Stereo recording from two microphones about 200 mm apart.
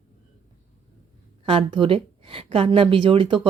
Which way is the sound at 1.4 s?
25° right (ahead or behind).